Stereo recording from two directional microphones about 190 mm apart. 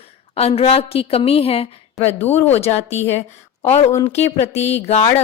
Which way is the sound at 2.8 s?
35° left (ahead or behind).